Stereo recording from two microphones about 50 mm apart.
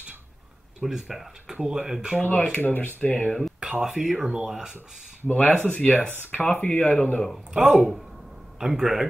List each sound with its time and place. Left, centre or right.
0.7 s speech: centre
2.5 s speech: left
3.0 s speech: left
3.8 s speech: centre
5.2 s speech: left
5.7 s speech: centre
7.5 s speech: right
8.5 s speech: centre